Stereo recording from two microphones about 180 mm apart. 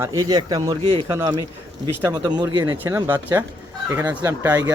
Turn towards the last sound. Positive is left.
turn(degrees=-10)  # may be behind; listen again after turning